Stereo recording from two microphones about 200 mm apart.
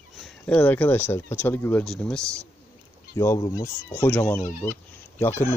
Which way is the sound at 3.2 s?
15° left (ahead or behind).